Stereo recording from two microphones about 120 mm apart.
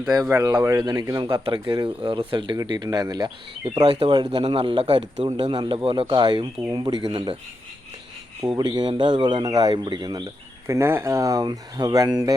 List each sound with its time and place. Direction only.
0.3 s speech: 25° right (ahead or behind); by 7.3 s 45° right (ahead or behind)
8.5 s speech: 35° right (ahead or behind)
10.7 s speech: 20° right (ahead or behind)